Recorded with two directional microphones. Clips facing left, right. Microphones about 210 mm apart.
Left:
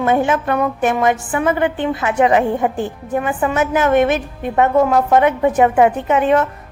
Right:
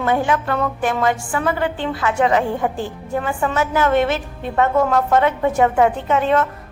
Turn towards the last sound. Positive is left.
turn(degrees=15)  # may be behind; listen again after turning